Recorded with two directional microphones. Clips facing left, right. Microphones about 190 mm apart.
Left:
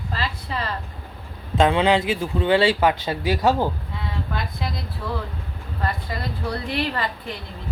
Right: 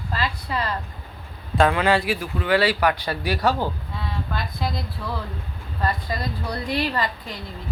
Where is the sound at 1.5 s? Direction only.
20° left (ahead or behind).